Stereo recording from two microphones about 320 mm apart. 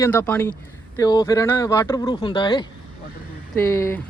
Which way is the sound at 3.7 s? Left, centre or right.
Centre.